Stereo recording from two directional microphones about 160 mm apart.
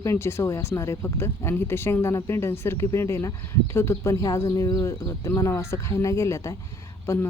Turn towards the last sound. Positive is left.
turn(degrees=20)  # may be behind; listen again after turning